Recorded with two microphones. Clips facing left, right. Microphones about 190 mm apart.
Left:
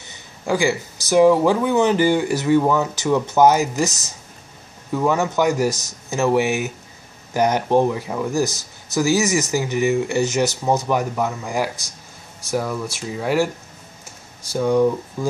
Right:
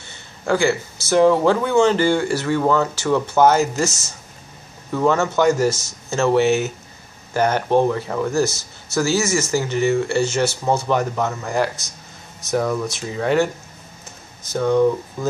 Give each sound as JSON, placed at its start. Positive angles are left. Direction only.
{"t": 0.0, "sound": "speech", "side_deg": 15}
{"t": 4.9, "sound": "speech", "side_deg": 15}
{"t": 14.5, "sound": "speech", "side_deg": 10}